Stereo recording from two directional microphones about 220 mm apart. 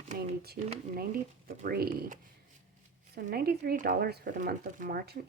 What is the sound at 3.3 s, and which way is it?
Speech, 45° right (ahead or behind).